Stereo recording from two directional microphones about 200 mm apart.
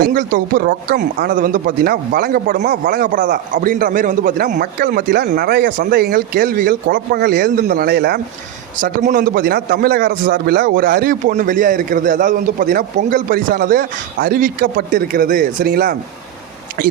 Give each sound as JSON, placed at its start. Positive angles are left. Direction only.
{"t": 0.0, "sound": "a man's voice", "side_deg": -45}
{"t": 8.8, "sound": "a man's voice", "side_deg": -40}